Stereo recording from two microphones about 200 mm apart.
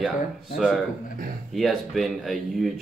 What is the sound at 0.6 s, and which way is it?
A man's voice, 5° right (ahead or behind).